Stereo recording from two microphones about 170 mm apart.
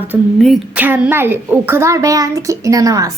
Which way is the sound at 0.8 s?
10° right (ahead or behind).